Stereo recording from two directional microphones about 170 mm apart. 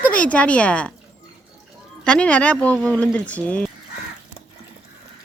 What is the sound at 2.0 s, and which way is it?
Speech, 5° left (ahead or behind).